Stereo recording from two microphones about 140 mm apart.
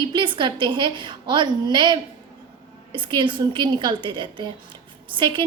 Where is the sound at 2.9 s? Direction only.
35° right (ahead or behind).